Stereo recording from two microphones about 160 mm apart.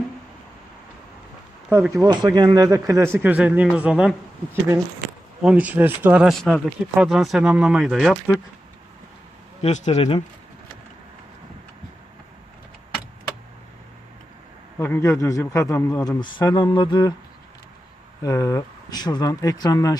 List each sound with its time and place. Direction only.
1.9 s speech: 25° right (ahead or behind); by 4.1 s 5° right (ahead or behind)
5.4 s speech: 5° right (ahead or behind)
9.6 s speech: 45° left (ahead or behind)
14.8 s a man's voice: 15° left (ahead or behind)
16.0 s speech: 30° left (ahead or behind)
18.2 s speech: 20° left (ahead or behind)